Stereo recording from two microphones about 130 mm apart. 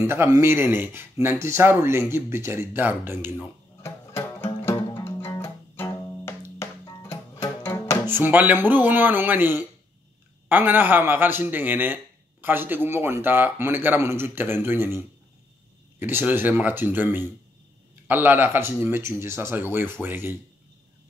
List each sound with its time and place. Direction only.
0.0 s a man's voice: 20° right (ahead or behind)
3.8 s music: 20° left (ahead or behind)
8.1 s a man's voice: 15° right (ahead or behind)